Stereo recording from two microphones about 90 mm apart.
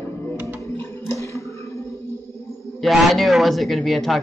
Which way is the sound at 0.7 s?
30° left (ahead or behind).